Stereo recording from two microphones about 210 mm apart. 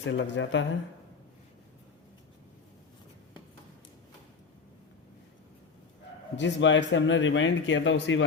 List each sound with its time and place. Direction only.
0.0 s speech: 60° left (ahead or behind)
6.3 s speech: 60° left (ahead or behind)